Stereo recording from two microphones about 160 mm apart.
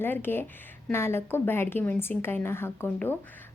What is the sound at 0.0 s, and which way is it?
A woman's voice, 15° left (ahead or behind).